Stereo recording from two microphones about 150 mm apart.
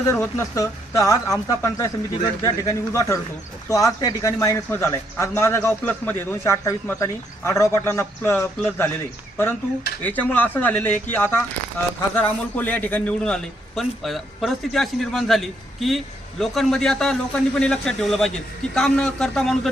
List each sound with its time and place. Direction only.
0.2 s a man's voice: 20° left (ahead or behind)
10.0 s a man's voice: 10° left (ahead or behind)